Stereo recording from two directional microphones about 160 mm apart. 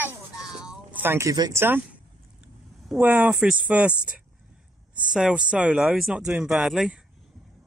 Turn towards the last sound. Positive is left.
turn(degrees=0)  # may be behind; listen again after turning